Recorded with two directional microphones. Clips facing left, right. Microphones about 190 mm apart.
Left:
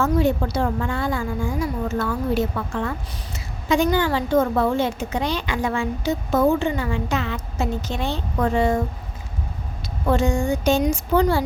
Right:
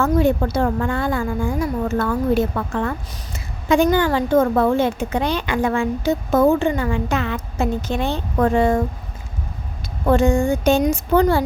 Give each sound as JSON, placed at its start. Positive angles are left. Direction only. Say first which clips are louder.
{"t": 0.0, "sound": "a woman's voice", "louder": "right 3 dB", "side_deg": -55}
{"t": 10.1, "sound": "speech", "louder": "right 4 dB", "side_deg": -55}